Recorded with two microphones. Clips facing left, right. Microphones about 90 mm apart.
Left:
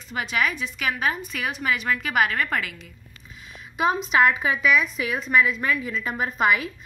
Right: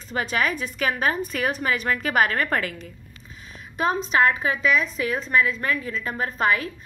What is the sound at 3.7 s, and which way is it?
Speech, 5° left (ahead or behind).